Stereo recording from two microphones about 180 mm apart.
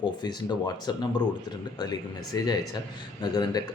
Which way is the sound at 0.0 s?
25° left (ahead or behind).